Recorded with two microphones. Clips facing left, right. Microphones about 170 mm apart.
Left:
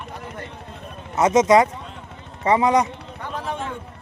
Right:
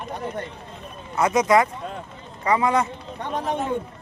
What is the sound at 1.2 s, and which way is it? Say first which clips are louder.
Speech: left 3 dB; 20° left (ahead or behind).